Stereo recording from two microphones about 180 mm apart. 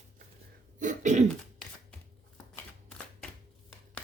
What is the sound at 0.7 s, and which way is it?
Cough, 45° right (ahead or behind).